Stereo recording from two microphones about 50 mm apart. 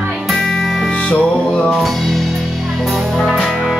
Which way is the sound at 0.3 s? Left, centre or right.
Centre.